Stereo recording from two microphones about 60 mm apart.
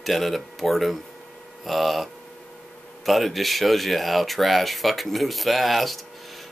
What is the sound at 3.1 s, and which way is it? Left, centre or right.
Speech, centre.